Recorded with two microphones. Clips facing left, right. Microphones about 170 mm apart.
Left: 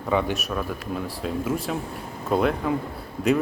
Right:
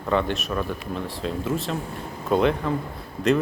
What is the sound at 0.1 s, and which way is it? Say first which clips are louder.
Speech: even; 10° left (ahead or behind).